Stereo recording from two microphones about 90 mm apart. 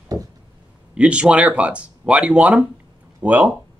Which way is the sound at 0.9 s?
15° right (ahead or behind).